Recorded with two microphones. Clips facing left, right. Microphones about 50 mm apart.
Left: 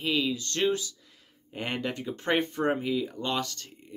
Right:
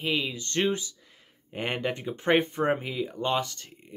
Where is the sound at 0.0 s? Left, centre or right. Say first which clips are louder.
Left 1 dB; right.